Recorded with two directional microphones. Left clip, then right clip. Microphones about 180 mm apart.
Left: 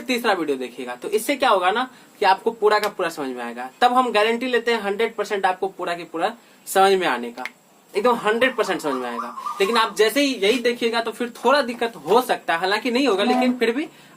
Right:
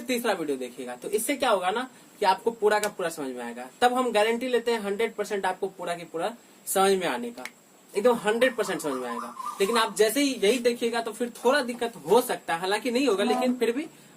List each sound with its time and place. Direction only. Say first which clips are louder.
0.1 s speech: left 6 dB; 20° left (ahead or behind)